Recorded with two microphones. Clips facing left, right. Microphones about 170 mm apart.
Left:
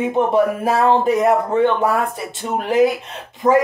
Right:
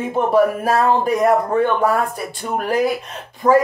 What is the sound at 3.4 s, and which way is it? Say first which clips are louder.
Speech: right 1 dB; 25° left (ahead or behind).